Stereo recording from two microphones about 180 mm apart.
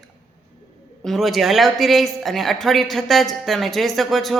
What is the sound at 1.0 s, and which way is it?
A woman's voice, centre (ahead or behind).